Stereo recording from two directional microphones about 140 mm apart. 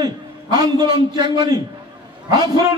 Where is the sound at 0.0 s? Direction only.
30° right (ahead or behind).